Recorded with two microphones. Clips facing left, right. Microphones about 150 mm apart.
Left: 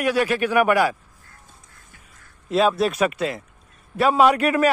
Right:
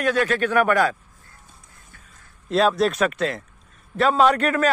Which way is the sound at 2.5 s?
5° left (ahead or behind).